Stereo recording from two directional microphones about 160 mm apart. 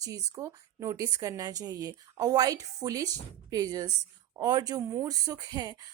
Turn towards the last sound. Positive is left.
turn(degrees=-25)  # may be behind; listen again after turning